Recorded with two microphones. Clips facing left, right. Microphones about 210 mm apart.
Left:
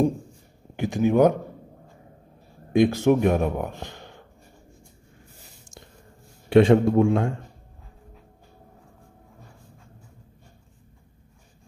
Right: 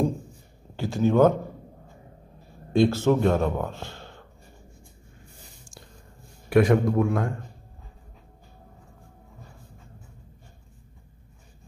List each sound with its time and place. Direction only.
0.7 s a man's voice: 15° left (ahead or behind)
2.7 s a man's voice: 15° left (ahead or behind)
6.5 s a man's voice: 25° left (ahead or behind)